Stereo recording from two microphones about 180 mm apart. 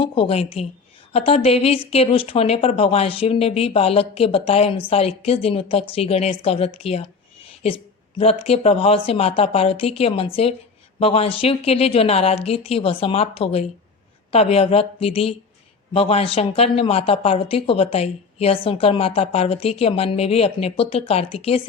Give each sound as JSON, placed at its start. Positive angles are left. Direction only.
{"t": 0.0, "sound": "speech", "side_deg": 30}